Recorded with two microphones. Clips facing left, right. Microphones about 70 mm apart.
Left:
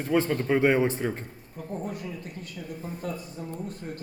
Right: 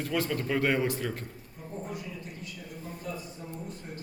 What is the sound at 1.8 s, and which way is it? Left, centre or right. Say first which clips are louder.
A man's voice: left 4 dB; left.